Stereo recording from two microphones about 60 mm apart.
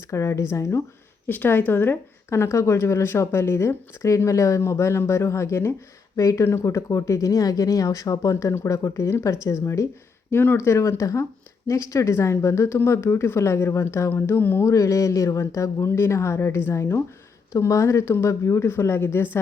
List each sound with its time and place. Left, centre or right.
0.1 s speech: left
1.3 s speech: left
6.1 s speech: left
10.3 s speech: left
10.6 s speech: left
14.3 s speech: left
14.6 s speech: left